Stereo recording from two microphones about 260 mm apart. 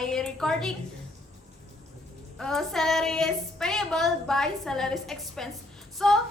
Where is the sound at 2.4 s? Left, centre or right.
Centre.